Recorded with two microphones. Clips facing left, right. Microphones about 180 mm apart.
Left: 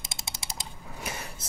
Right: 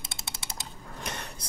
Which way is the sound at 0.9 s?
5° left (ahead or behind).